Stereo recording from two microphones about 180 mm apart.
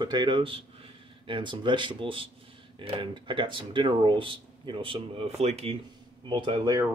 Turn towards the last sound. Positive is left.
turn(degrees=-25)  # may be behind; listen again after turning